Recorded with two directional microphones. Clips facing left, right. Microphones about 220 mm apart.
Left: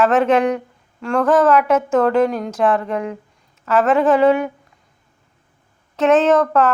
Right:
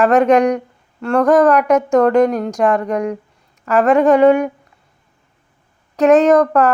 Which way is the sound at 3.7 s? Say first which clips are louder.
Right 3 dB; centre (ahead or behind).